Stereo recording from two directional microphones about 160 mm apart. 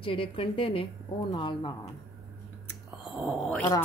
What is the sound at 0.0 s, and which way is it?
A woman's voice, 35° left (ahead or behind).